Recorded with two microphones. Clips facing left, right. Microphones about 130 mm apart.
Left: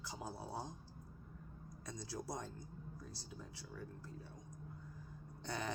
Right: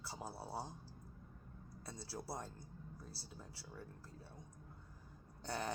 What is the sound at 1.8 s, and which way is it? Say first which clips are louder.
Speech: left 2 dB; 30° right (ahead or behind).